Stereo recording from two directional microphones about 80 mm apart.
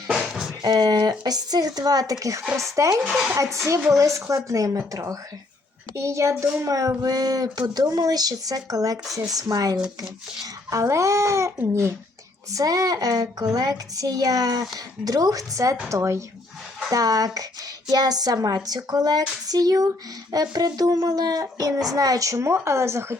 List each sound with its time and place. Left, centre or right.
0.1 s music: centre
0.6 s speech: right
3.1 s speech: centre
3.3 s speech: right
12.5 s speech: right